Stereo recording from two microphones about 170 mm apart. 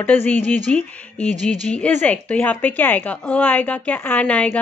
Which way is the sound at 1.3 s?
45° right (ahead or behind).